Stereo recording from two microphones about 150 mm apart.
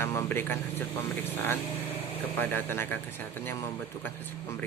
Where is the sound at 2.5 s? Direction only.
15° left (ahead or behind).